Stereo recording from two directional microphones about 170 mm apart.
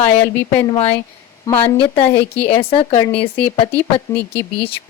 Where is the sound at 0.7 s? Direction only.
35° left (ahead or behind).